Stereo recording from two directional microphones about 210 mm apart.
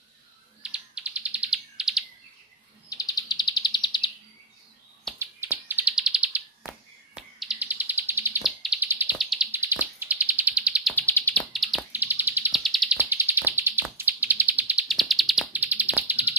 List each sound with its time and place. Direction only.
0.6 s bird: 5° right (ahead or behind)
2.9 s bird: 15° left (ahead or behind)
5.2 s bird: 10° right (ahead or behind)
7.2 s a sound: 5° right (ahead or behind)
9.5 s bird: 10° right (ahead or behind)